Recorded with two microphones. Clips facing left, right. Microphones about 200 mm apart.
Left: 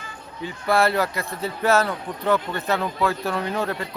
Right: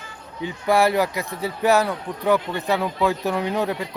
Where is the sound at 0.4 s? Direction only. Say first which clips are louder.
Right 2 dB; 15° right (ahead or behind).